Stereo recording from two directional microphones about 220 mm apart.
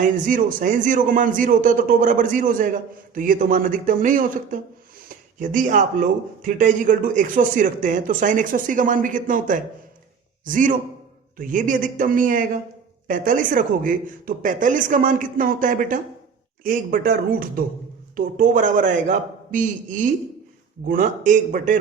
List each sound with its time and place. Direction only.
0.0 s speech: 35° right (ahead or behind)
18.3 s speech: 35° right (ahead or behind)